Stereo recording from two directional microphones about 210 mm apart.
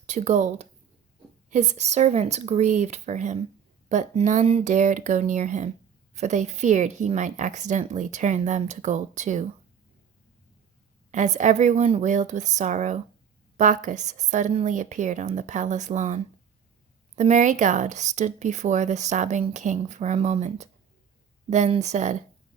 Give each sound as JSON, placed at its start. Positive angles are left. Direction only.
{"t": 0.0, "sound": "speech", "side_deg": -35}
{"t": 11.1, "sound": "speech", "side_deg": -35}